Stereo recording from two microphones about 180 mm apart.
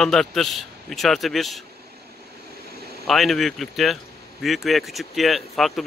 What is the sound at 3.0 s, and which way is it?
A man's voice, centre (ahead or behind).